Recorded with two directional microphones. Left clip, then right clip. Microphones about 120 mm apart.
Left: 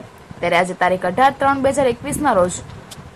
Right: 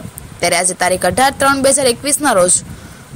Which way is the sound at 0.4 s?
45° right (ahead or behind).